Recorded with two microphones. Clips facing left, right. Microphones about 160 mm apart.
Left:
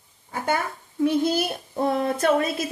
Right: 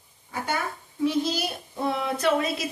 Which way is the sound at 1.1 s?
55° left (ahead or behind).